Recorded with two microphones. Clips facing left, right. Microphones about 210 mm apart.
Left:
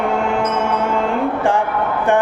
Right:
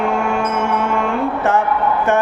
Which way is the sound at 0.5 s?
15° left (ahead or behind).